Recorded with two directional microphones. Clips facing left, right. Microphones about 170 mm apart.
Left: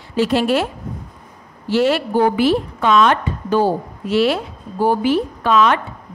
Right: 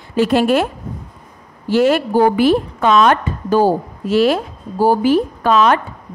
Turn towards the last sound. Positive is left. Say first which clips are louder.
# right 2 dB
turn(degrees=-40)  # may be behind; listen again after turning